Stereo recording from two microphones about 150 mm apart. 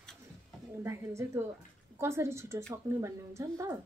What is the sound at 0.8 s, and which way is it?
A woman's voice, 20° right (ahead or behind).